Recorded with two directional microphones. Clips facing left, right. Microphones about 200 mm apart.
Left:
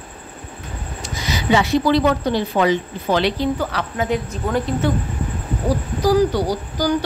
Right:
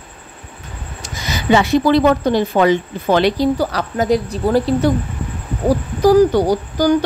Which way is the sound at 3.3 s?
40° right (ahead or behind).